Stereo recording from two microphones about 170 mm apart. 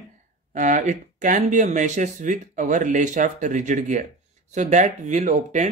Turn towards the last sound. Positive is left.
turn(degrees=-45)  # may be behind; listen again after turning